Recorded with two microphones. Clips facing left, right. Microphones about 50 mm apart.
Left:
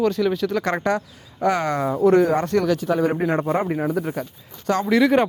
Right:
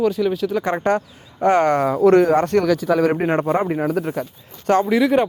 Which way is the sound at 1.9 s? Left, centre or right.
Right.